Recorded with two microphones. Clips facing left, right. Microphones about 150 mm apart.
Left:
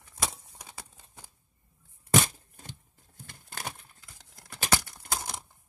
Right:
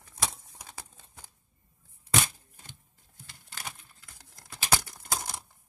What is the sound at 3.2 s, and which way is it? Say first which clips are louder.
Crumpling: left 4 dB; 50° left (ahead or behind).